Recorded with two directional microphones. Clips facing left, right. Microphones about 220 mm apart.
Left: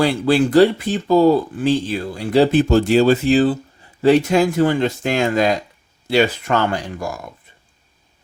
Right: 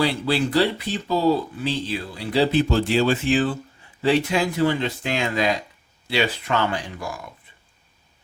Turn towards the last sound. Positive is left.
turn(degrees=45)  # may be behind; listen again after turning